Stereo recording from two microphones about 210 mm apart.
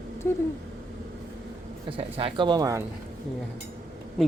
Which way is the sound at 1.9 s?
25° right (ahead or behind).